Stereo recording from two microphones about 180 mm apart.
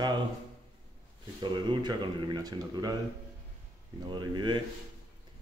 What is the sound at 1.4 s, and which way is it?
Speech, 25° right (ahead or behind).